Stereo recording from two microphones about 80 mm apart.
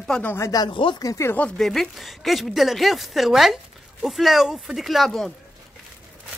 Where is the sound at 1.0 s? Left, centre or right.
Left.